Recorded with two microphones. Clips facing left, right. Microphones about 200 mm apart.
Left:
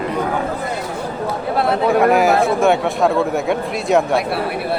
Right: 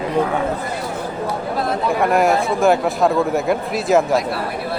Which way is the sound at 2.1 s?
Centre (ahead or behind).